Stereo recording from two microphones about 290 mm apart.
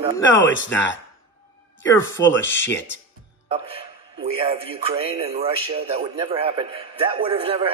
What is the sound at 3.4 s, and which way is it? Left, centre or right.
A man's voice, centre.